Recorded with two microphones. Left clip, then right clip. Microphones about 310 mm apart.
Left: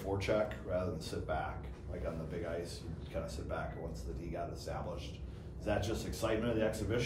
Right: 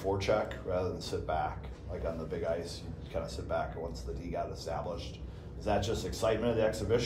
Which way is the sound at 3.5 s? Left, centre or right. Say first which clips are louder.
Right 8 dB; right.